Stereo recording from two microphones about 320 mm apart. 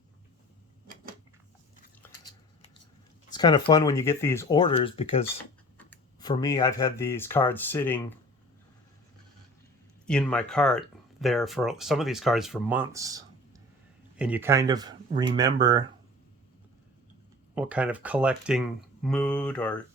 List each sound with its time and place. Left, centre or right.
2.0 s biting: centre
3.3 s speech: centre
5.7 s speech: centre
10.1 s speech: centre
17.5 s speech: centre